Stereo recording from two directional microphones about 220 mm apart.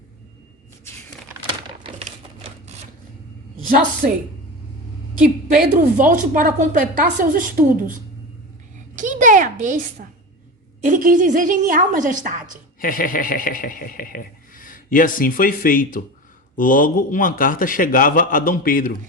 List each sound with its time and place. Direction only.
1.8 s typewriter: 25° right (ahead or behind)
4.0 s a woman's voice: 40° right (ahead or behind)
5.6 s a woman's voice: 40° right (ahead or behind)
9.0 s a woman's voice: 35° right (ahead or behind)
12.8 s speech: 40° left (ahead or behind)